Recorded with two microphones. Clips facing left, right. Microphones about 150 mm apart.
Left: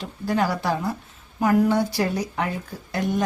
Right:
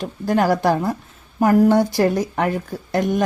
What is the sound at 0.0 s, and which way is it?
A woman's voice, 45° right (ahead or behind).